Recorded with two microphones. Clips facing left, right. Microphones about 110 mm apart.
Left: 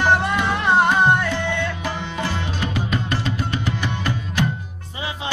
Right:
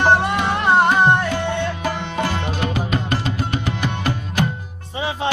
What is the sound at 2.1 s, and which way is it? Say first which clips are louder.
Music: right 3 dB; 45° right (ahead or behind).